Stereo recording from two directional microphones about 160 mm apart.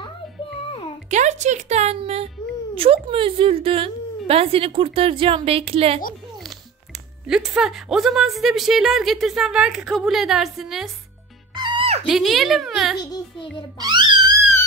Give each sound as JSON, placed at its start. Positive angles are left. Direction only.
{"t": 0.7, "sound": "music", "side_deg": 35}
{"t": 1.1, "sound": "a woman's voice", "side_deg": -45}
{"t": 7.2, "sound": "speech", "side_deg": -5}
{"t": 11.5, "sound": "music", "side_deg": -30}
{"t": 12.1, "sound": "speech", "side_deg": 0}
{"t": 12.9, "sound": "a child's voice", "side_deg": 25}
{"t": 13.7, "sound": "speech", "side_deg": -25}